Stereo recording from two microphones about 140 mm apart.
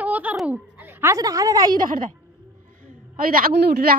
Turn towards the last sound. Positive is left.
turn(degrees=-90)